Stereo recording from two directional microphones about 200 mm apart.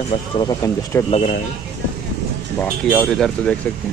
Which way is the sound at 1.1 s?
40° left (ahead or behind).